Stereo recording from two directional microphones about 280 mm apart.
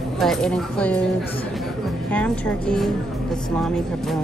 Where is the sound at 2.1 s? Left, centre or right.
Centre.